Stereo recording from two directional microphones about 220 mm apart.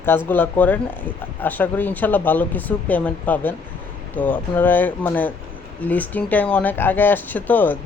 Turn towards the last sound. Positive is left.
turn(degrees=10)  # may be behind; listen again after turning